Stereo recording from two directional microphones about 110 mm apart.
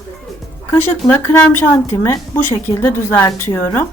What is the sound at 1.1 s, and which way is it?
A woman's voice, 20° left (ahead or behind).